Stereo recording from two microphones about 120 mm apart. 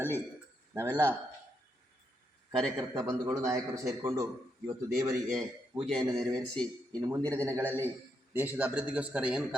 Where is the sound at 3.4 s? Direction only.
30° right (ahead or behind).